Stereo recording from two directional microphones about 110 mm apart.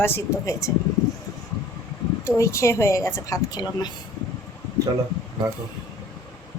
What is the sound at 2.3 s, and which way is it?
Speech, 30° left (ahead or behind).